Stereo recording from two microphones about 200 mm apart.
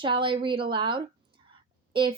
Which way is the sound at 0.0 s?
25° right (ahead or behind).